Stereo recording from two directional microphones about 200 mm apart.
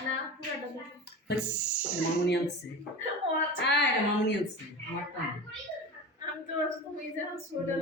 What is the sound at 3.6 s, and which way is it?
Speech, 60° left (ahead or behind).